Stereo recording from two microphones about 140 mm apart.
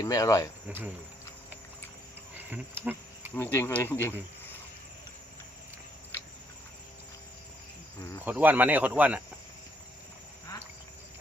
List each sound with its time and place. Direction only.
0.0 s speech: 25° left (ahead or behind)
2.5 s cricket: 15° right (ahead or behind)
3.3 s speech: 20° left (ahead or behind)
8.2 s speech: 10° right (ahead or behind)